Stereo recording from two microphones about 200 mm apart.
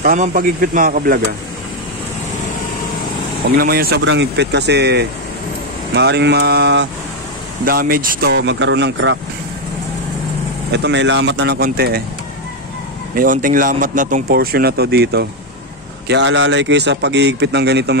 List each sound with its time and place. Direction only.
0.0 s speech: 45° right (ahead or behind)
3.5 s a man's voice: 50° right (ahead or behind)
7.6 s speech: 45° right (ahead or behind); by 9.2 s 65° right (ahead or behind)
10.7 s a man's voice: 60° right (ahead or behind)
13.1 s a man's voice: 45° right (ahead or behind)